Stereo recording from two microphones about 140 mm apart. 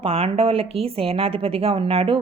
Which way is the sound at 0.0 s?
45° right (ahead or behind).